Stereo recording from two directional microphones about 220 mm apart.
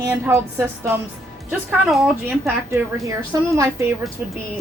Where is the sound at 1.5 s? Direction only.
Centre (ahead or behind).